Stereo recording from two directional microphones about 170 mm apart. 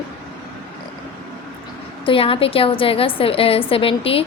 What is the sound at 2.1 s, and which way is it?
A woman's voice, 30° left (ahead or behind).